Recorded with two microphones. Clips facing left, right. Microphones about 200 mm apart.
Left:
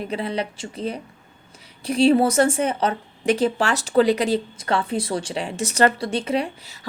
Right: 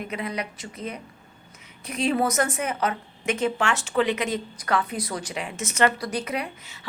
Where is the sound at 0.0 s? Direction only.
30° left (ahead or behind).